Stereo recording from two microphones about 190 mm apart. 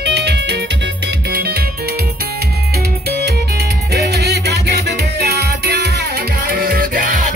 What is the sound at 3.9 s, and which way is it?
Music, 60° right (ahead or behind).